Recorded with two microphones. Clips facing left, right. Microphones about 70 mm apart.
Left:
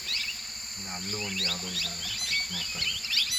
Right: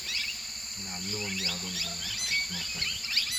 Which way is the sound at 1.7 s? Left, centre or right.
Centre.